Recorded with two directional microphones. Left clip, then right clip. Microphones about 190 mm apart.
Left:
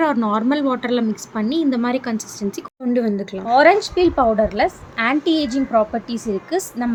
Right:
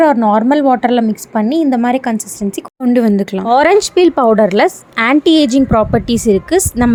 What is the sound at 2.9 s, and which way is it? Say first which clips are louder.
A woman's voice: right 7 dB; 50° right (ahead or behind).